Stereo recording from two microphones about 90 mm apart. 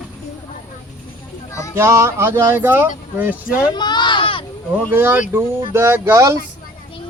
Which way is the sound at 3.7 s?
55° left (ahead or behind).